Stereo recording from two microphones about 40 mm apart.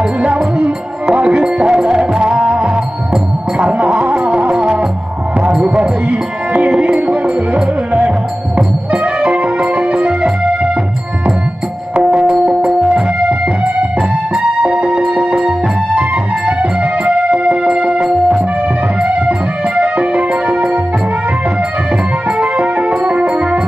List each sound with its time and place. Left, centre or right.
0.2 s music: right
3.7 s music: right
11.9 s music: right
14.6 s music: right
19.8 s music: right
22.4 s music: right